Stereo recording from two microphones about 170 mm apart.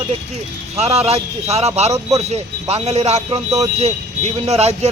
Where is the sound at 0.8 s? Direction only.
35° right (ahead or behind).